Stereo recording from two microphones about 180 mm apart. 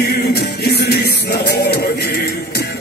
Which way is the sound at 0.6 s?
65° left (ahead or behind).